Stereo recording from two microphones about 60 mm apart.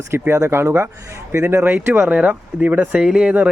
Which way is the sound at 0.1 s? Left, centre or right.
Right.